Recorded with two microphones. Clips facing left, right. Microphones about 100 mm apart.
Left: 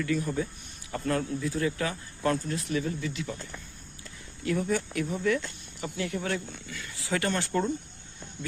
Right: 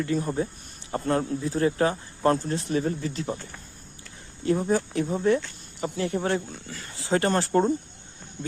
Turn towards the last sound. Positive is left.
turn(degrees=-40)  # may be behind; listen again after turning